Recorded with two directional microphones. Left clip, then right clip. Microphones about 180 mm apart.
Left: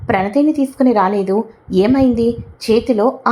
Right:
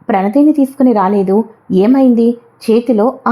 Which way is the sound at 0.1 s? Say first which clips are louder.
Right 4 dB; 25° right (ahead or behind).